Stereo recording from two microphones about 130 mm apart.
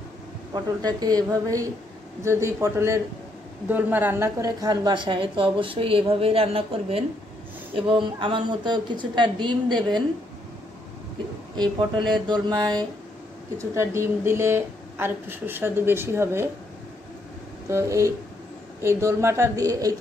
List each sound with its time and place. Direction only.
0.5 s a woman's voice: 30° right (ahead or behind)
12.3 s a woman's voice: 35° right (ahead or behind)
13.6 s a woman's voice: 20° right (ahead or behind)
17.6 s a woman's voice: 20° right (ahead or behind)